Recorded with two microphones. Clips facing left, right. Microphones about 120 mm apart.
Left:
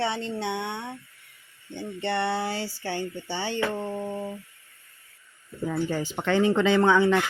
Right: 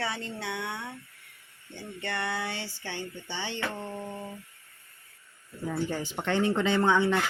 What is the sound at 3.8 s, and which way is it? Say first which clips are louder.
Speech: left 6 dB; 30° left (ahead or behind).